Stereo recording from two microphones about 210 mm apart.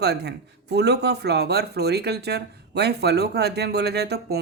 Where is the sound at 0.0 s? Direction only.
50° right (ahead or behind).